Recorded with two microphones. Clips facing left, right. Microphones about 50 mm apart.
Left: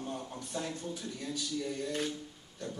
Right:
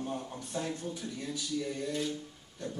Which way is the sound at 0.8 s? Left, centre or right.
Right.